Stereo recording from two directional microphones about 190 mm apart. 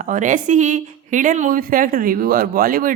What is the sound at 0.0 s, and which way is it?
Speech, 45° right (ahead or behind).